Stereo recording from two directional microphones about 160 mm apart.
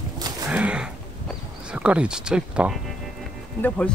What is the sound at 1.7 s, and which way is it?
Speech, 5° right (ahead or behind).